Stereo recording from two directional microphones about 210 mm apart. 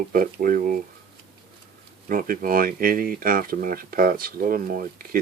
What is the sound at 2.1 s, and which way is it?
Speech, 40° right (ahead or behind).